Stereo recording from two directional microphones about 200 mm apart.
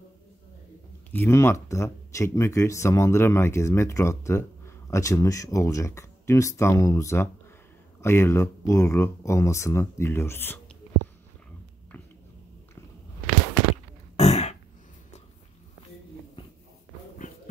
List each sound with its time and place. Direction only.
1.1 s speech: 10° left (ahead or behind)
14.1 s throat clearing: 35° left (ahead or behind)